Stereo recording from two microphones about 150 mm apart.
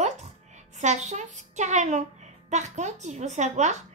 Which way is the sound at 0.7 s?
50° right (ahead or behind).